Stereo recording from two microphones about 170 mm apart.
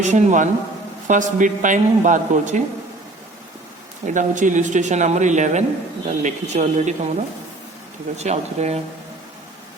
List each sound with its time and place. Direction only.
0.0 s speech: 45° right (ahead or behind)
4.0 s speech: 50° right (ahead or behind)
8.1 s speech: 40° right (ahead or behind)